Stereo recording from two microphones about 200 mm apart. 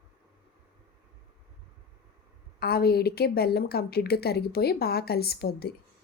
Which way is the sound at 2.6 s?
50° left (ahead or behind).